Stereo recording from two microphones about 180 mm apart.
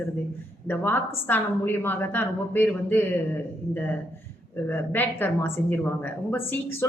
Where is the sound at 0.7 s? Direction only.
10° left (ahead or behind).